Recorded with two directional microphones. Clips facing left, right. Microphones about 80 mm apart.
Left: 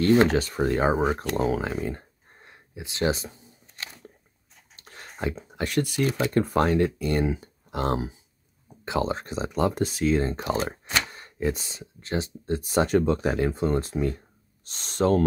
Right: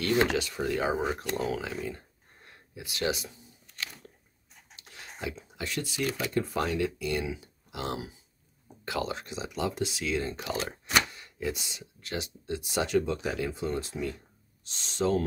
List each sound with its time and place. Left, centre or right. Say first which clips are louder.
0.0 s speech: left 7 dB; left
2.4 s camera: left 3 dB; left
4.7 s a sound: left 3 dB; left
5.2 s speech: left 7 dB; left
6.0 s speech: left 6 dB; left
6.3 s speech: left 9 dB; left
8.8 s speech: left 6 dB; left
9.1 s speech: left 7 dB; left